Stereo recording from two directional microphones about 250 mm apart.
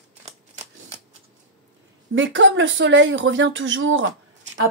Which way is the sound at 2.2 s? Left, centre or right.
Right.